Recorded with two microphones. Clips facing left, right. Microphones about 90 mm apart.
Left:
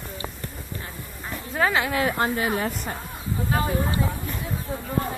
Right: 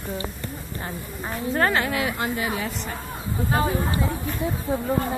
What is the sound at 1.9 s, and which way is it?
Speech, 35° left (ahead or behind).